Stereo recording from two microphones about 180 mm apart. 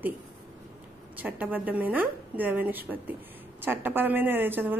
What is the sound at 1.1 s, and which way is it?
A woman's voice, 10° right (ahead or behind).